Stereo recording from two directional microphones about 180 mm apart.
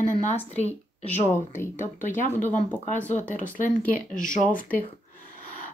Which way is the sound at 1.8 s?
45° left (ahead or behind).